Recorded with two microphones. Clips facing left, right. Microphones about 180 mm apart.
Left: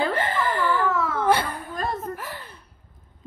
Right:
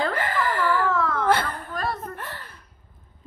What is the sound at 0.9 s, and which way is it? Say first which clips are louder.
Whimper: even; 5° left (ahead or behind).